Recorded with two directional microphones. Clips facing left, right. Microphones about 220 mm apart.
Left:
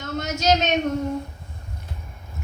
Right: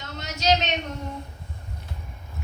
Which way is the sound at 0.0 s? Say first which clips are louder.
Left 4 dB; 50° left (ahead or behind).